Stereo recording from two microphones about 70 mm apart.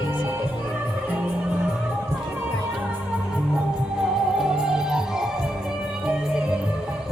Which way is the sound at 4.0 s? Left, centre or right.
Centre.